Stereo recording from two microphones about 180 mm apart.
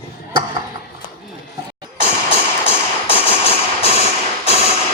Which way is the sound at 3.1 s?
30° left (ahead or behind).